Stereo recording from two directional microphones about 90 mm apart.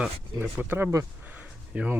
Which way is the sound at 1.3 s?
15° right (ahead or behind).